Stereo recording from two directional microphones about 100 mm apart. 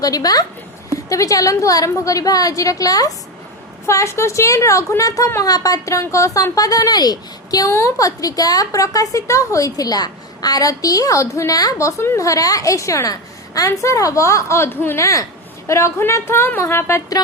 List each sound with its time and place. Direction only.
0.0 s a woman's voice: 40° left (ahead or behind)